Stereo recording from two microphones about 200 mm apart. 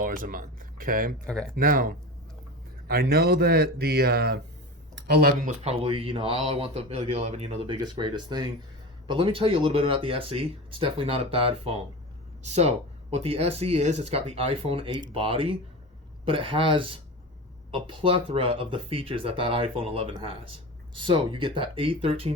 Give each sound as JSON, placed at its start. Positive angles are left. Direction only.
{"t": 0.0, "sound": "speech", "side_deg": -45}
{"t": 4.9, "sound": "a sound", "side_deg": -55}
{"t": 5.5, "sound": "speech", "side_deg": -30}